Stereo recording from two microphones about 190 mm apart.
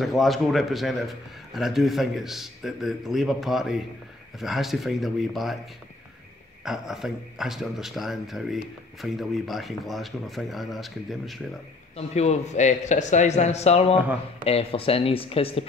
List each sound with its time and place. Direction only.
0.0 s speech: centre (ahead or behind)
6.6 s speech: 5° right (ahead or behind)
12.1 s speech: 35° left (ahead or behind)